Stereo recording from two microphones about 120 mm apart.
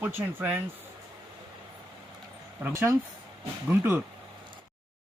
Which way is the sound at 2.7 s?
20° right (ahead or behind).